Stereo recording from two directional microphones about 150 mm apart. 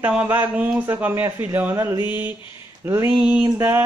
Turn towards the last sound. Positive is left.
turn(degrees=-15)  # may be behind; listen again after turning